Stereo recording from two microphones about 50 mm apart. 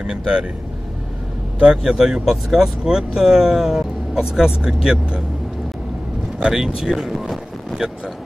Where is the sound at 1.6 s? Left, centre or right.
Centre.